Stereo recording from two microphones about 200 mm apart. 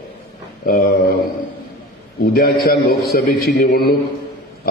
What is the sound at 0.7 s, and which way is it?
Speech, 50° left (ahead or behind).